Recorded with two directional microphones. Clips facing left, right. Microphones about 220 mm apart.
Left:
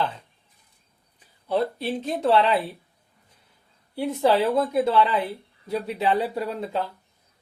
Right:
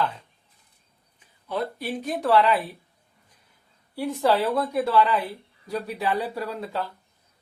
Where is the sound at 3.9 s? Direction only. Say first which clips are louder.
Left 2 dB; 20° left (ahead or behind).